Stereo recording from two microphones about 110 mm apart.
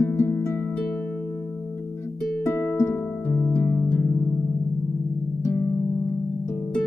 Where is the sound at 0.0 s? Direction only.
25° left (ahead or behind).